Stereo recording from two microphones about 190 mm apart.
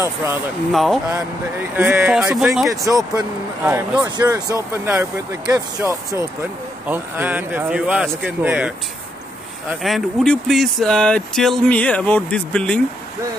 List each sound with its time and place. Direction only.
0.0 s speech: 15° right (ahead or behind)
0.7 s speech: centre (ahead or behind)
1.8 s speech: 10° right (ahead or behind)
2.7 s speech: 15° right (ahead or behind); by 12.8 s 5° left (ahead or behind)